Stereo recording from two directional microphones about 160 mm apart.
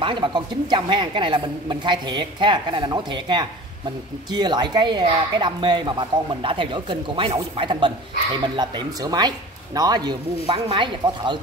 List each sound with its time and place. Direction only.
0.0 s a woman's voice: 30° right (ahead or behind)